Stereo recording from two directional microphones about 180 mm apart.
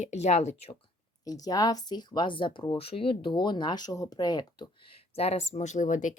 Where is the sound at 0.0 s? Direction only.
40° left (ahead or behind).